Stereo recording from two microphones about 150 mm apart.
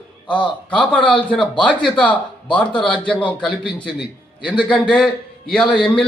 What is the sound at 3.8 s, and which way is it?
Speech, 30° left (ahead or behind).